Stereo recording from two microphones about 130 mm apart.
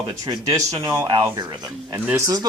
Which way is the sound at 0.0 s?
30° right (ahead or behind).